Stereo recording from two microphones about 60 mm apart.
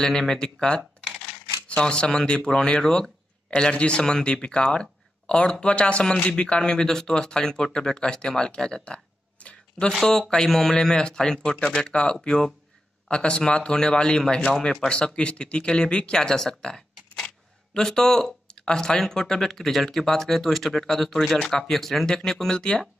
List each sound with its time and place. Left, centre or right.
0.0 s speech: centre
9.9 s speech: centre